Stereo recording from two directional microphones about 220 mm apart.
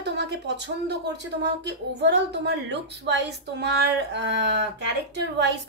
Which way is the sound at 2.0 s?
50° right (ahead or behind).